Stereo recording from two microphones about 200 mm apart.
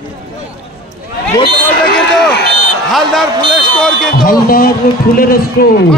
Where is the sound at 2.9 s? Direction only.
Centre (ahead or behind).